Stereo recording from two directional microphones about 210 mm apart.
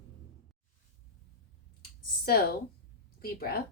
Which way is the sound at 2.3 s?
45° left (ahead or behind).